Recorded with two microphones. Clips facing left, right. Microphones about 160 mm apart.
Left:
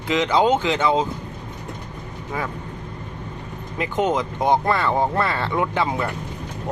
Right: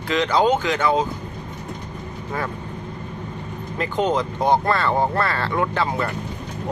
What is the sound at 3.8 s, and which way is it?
Speech, 15° left (ahead or behind).